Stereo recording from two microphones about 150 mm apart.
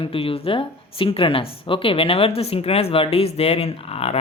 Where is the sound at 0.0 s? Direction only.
40° left (ahead or behind).